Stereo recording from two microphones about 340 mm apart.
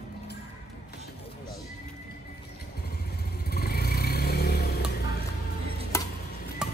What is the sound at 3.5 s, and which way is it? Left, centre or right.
Vehicle, left.